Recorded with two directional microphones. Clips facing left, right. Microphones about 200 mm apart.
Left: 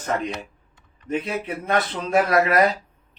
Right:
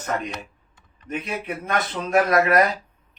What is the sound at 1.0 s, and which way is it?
Speech, 30° left (ahead or behind).